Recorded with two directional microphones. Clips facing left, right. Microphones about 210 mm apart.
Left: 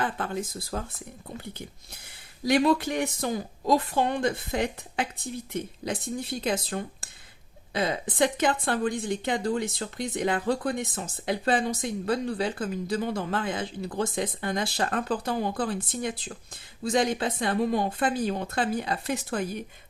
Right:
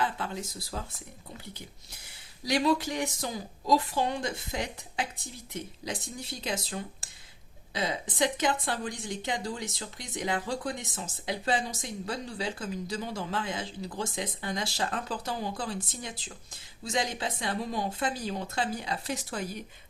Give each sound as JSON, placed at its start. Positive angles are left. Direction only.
{"t": 0.2, "sound": "speech", "side_deg": 55}
{"t": 2.4, "sound": "a woman's voice", "side_deg": 55}